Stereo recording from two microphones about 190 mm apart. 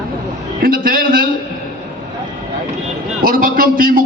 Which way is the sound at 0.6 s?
50° right (ahead or behind).